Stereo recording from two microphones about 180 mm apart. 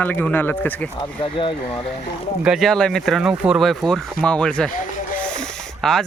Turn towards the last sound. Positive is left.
turn(degrees=5)  # may be behind; listen again after turning